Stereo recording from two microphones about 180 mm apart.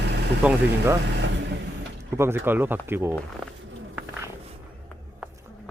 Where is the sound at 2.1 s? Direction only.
15° right (ahead or behind).